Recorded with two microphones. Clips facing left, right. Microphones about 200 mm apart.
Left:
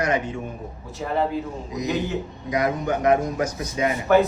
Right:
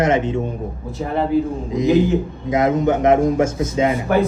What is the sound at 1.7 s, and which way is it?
A man's voice, 25° right (ahead or behind).